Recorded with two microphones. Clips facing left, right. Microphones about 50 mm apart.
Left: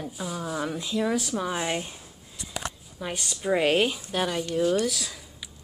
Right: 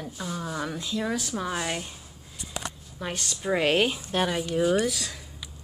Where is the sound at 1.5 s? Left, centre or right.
Centre.